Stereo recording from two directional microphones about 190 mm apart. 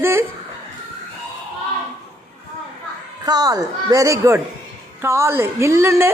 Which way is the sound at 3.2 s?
20° right (ahead or behind).